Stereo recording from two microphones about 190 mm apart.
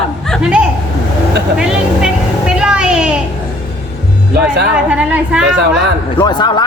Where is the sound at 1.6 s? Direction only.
5° right (ahead or behind).